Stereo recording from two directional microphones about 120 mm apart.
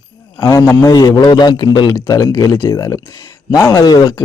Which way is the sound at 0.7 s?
25° left (ahead or behind).